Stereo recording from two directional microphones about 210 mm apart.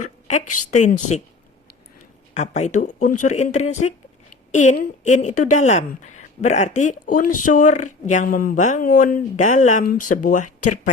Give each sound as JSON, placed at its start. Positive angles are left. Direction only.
{"t": 0.0, "sound": "a sound", "side_deg": 35}
{"t": 0.6, "sound": "speech", "side_deg": 35}
{"t": 2.3, "sound": "speech", "side_deg": 35}